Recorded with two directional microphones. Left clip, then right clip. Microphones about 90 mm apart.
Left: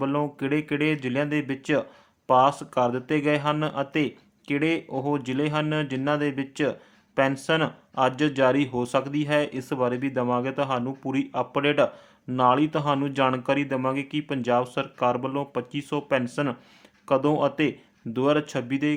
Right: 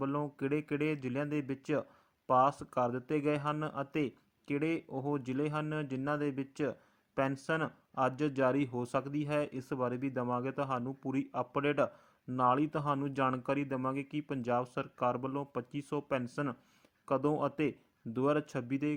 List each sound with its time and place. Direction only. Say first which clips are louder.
0.0 s speech: left 9 dB; 30° right (ahead or behind)